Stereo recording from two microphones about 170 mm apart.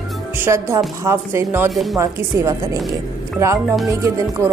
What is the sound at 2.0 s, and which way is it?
Speech, 15° right (ahead or behind).